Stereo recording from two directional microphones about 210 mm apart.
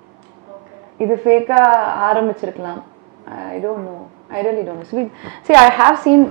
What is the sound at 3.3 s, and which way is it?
A woman's voice, 30° right (ahead or behind).